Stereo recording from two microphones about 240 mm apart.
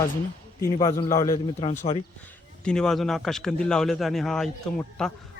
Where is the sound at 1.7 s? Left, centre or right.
Left.